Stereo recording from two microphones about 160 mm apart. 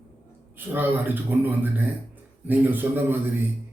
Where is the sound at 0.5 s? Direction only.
10° right (ahead or behind).